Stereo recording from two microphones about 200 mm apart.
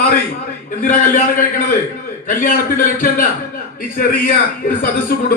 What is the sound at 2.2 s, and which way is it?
A man's voice, 40° left (ahead or behind).